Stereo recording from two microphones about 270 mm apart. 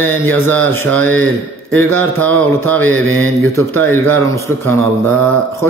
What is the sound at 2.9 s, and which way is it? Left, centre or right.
Mantra, right.